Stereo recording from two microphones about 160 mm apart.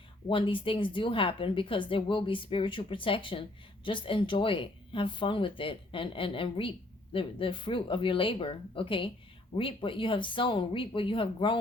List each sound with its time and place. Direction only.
0.3 s speech: 30° left (ahead or behind)